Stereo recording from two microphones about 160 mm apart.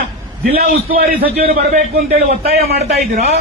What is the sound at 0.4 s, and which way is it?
A man's voice, 75° right (ahead or behind).